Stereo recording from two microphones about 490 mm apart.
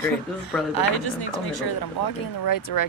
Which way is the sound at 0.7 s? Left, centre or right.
Left.